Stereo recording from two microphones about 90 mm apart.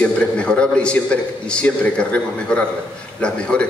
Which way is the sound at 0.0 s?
10° left (ahead or behind).